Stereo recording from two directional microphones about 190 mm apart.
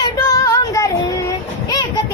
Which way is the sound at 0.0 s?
20° left (ahead or behind).